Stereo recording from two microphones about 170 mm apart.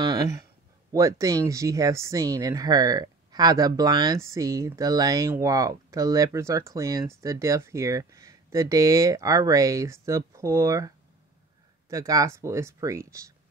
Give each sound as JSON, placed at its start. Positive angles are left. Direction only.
{"t": 0.0, "sound": "a sound", "side_deg": -25}
{"t": 0.9, "sound": "speech", "side_deg": -20}
{"t": 11.9, "sound": "speech", "side_deg": -20}